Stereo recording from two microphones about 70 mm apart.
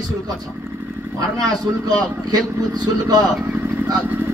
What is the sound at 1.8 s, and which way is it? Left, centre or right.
Speech, right.